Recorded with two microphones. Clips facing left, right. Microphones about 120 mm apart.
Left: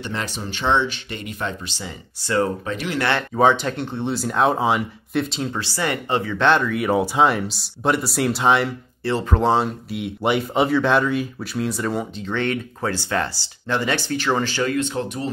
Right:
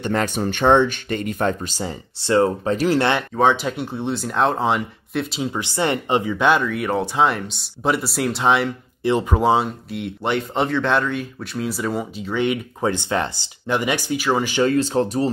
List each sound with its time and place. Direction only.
0.0 s speech: 50° right (ahead or behind)
2.2 s speech: 25° right (ahead or behind)
3.0 s speech: 20° right (ahead or behind)
3.3 s speech: centre (ahead or behind)
9.0 s speech: 15° right (ahead or behind)
9.4 s speech: 5° right (ahead or behind)
14.6 s speech: 30° right (ahead or behind)